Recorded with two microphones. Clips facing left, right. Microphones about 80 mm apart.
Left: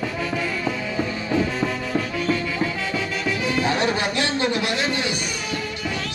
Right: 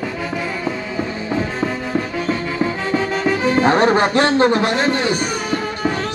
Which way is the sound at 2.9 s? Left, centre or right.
Right.